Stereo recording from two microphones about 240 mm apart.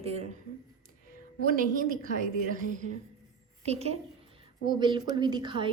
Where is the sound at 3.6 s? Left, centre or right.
Right.